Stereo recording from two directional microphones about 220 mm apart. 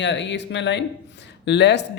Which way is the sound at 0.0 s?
55° left (ahead or behind).